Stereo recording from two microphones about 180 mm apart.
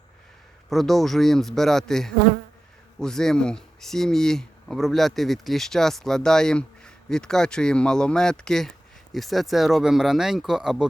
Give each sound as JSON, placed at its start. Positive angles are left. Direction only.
{"t": 0.7, "sound": "speech", "side_deg": 0}